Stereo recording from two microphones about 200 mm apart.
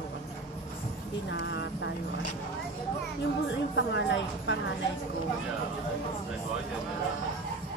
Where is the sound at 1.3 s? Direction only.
65° left (ahead or behind).